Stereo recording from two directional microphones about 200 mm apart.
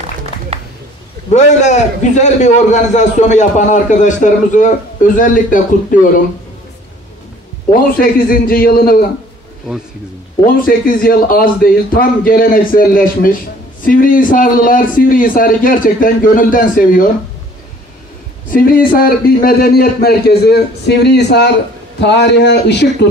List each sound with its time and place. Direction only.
1.3 s a man's voice: 35° left (ahead or behind)
8.0 s a man's voice: 45° left (ahead or behind)
10.4 s a man's voice: 45° left (ahead or behind)
18.5 s a man's voice: 45° left (ahead or behind)